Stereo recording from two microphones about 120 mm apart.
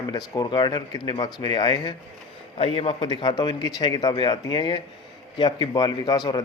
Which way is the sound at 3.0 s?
40° left (ahead or behind).